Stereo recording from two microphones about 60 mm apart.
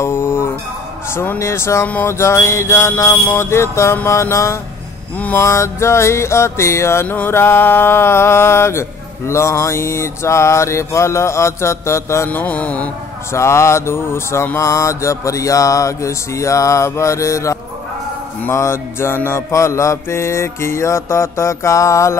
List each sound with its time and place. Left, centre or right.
0.0 s music: left
1.1 s speech: left
1.4 s speech: left
5.1 s mantra: left
5.4 s speech: left
7.1 s music: left
7.3 s speech: left
12.3 s mantra: left
13.3 s speech: left
14.6 s mantra: left
18.5 s speech: left
19.5 s speech: left